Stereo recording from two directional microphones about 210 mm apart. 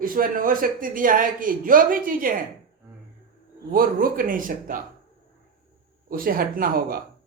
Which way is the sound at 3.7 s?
45° right (ahead or behind).